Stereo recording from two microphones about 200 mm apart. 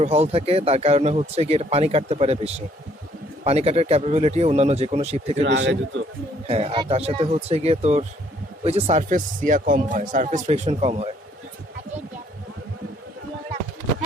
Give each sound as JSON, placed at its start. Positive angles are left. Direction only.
{"t": 0.0, "sound": "speech", "side_deg": -30}
{"t": 5.4, "sound": "speech", "side_deg": -65}
{"t": 6.5, "sound": "speech", "side_deg": -30}